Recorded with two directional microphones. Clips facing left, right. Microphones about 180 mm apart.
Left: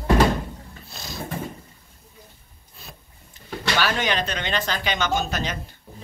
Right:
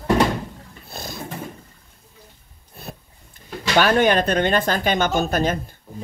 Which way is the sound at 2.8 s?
60° right (ahead or behind).